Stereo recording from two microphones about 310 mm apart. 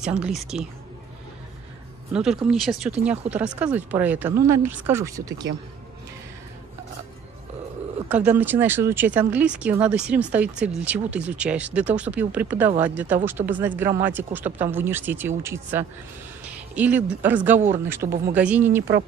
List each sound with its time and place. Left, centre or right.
0.0 s speech: centre
2.1 s speech: centre
8.1 s speech: centre
18.0 s speech: right
18.3 s speech: centre